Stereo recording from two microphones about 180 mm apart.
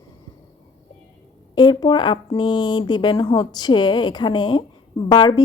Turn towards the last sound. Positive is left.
turn(degrees=25)  # may be behind; listen again after turning